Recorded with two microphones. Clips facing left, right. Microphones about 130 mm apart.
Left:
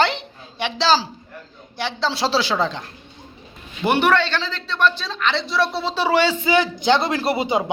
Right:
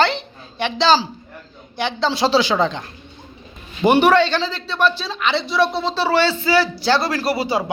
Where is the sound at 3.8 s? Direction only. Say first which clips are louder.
Right 4 dB; 15° right (ahead or behind); by 5.9 s centre (ahead or behind).